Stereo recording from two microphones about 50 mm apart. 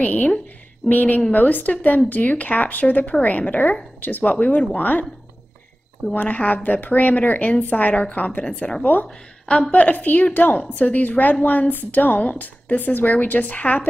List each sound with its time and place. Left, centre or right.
0.0 s a woman's voice: left
6.1 s a woman's voice: left